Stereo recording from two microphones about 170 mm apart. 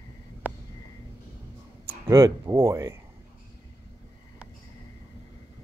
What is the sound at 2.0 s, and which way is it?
Speech, 20° right (ahead or behind).